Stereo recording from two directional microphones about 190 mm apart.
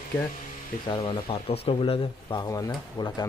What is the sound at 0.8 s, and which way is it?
Speech, 25° left (ahead or behind).